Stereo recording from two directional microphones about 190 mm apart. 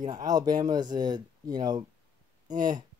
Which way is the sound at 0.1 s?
20° right (ahead or behind).